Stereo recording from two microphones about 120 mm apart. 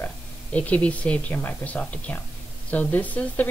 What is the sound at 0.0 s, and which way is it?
Speech, 10° left (ahead or behind).